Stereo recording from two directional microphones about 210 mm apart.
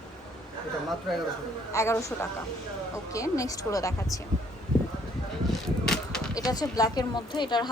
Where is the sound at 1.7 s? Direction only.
15° left (ahead or behind).